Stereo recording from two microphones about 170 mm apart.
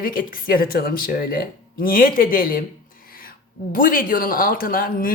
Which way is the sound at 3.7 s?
55° left (ahead or behind).